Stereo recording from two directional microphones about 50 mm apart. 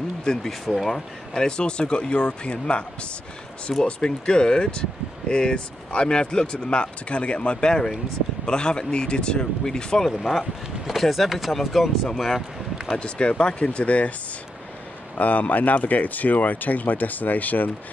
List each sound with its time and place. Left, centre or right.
0.2 s speech: centre
0.5 s speech: centre
0.9 s speech: centre
12.9 s speech: left
15.1 s speech: left